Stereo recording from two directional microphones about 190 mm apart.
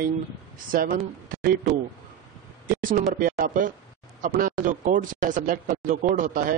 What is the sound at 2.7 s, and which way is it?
Speech, 45° right (ahead or behind).